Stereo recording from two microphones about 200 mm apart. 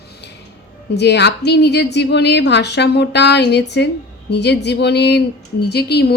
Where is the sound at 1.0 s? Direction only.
55° left (ahead or behind).